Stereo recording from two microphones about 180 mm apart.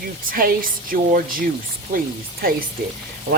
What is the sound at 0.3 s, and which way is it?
Speech, 50° right (ahead or behind).